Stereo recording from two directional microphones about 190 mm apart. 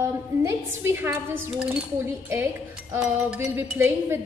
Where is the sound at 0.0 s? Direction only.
15° right (ahead or behind).